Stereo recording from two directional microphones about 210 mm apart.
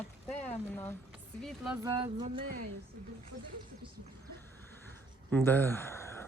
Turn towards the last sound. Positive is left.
turn(degrees=10)  # may be behind; listen again after turning